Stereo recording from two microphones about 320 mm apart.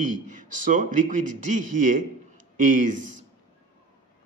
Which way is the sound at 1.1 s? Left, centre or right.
Right.